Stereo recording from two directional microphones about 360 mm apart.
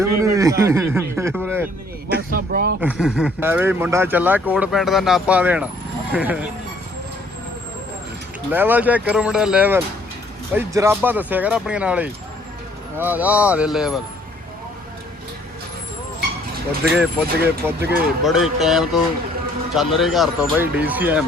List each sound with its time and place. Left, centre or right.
0.2 s speech: centre
2.1 s a sound: right
2.8 s speech: centre
8.4 s speech: centre
17.0 s speech: centre